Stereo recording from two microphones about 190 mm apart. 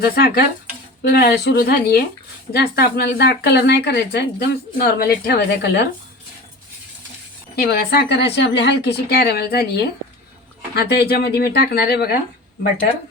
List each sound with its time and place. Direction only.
0.0 s speech: 55° left (ahead or behind)
7.5 s speech: 55° left (ahead or behind)